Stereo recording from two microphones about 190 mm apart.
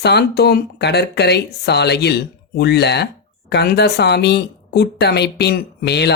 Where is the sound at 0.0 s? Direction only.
60° left (ahead or behind).